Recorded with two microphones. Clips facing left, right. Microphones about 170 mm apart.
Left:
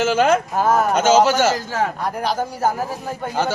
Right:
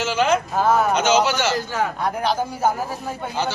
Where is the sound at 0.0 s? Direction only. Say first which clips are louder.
Left 3 dB; 50° left (ahead or behind).